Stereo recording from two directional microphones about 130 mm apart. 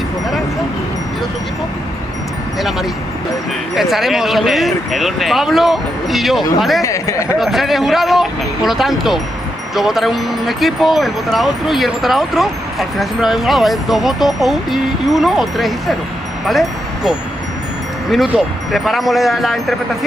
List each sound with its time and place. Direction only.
3.7 s speech: centre (ahead or behind)
6.8 s speech: 25° left (ahead or behind)
7.3 s speech: centre (ahead or behind)
16.4 s wind chime: centre (ahead or behind)
18.1 s speech: centre (ahead or behind)